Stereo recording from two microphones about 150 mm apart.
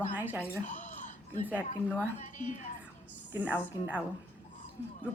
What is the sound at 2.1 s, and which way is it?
Speech, 50° left (ahead or behind).